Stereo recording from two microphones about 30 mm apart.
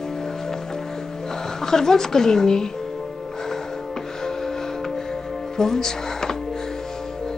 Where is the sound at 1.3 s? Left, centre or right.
Centre.